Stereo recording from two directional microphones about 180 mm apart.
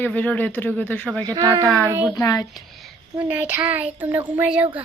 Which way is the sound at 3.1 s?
10° right (ahead or behind).